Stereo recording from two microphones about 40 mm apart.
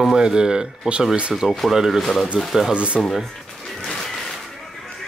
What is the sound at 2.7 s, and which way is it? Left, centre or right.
Speech, right.